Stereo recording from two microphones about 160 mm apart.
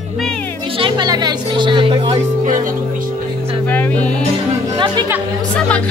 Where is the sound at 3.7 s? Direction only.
10° left (ahead or behind).